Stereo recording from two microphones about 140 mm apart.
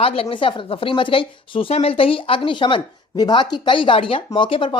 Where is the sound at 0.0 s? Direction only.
40° left (ahead or behind).